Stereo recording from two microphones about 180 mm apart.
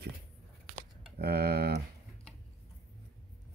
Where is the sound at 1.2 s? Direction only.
60° right (ahead or behind).